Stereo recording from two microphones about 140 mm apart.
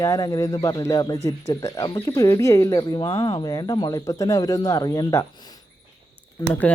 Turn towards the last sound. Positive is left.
turn(degrees=10)  # may be behind; listen again after turning